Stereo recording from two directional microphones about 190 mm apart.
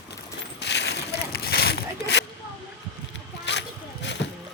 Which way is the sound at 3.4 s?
65° left (ahead or behind).